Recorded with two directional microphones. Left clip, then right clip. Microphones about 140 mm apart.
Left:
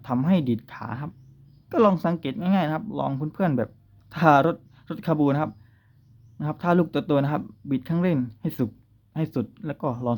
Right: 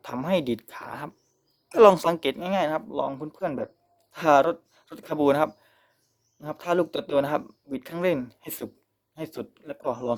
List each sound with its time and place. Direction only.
0.0 s speech: 35° right (ahead or behind)
1.7 s a woman's voice: 60° right (ahead or behind)
2.1 s speech: 40° right (ahead or behind)
9.1 s speech: 20° right (ahead or behind)
9.8 s speech: 30° right (ahead or behind)